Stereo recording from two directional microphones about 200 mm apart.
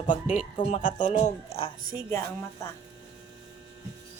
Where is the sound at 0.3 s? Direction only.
35° left (ahead or behind).